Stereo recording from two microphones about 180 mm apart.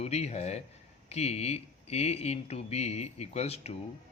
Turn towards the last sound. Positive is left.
turn(degrees=35)  # may be behind; listen again after turning